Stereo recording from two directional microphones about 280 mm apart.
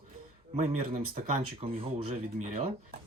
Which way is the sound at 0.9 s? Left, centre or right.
Right.